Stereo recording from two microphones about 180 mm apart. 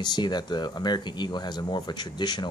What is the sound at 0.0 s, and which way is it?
Speech, 25° left (ahead or behind).